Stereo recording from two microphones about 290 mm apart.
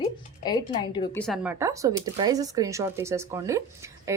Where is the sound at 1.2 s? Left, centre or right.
Centre.